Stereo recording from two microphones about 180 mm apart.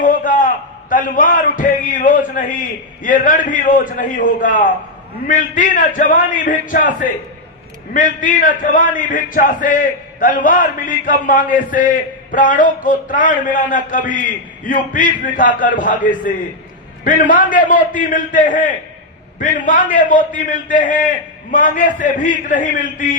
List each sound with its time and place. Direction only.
0.0 s a man's voice: 45° left (ahead or behind)